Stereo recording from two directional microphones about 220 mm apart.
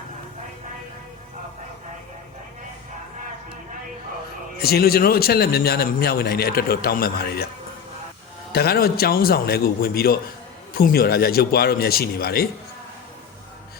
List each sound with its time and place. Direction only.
4.5 s a man's voice: 45° left (ahead or behind)
8.5 s a man's voice: 45° left (ahead or behind)